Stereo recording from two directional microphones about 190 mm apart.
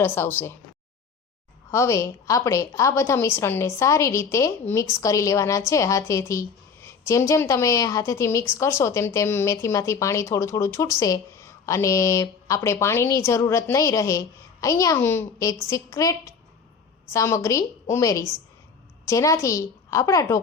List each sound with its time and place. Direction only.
0.0 s a woman's voice: 10° left (ahead or behind)
1.7 s a woman's voice: 15° left (ahead or behind)